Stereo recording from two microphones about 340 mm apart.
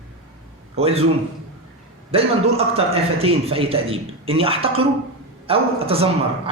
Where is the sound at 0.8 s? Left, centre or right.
Centre.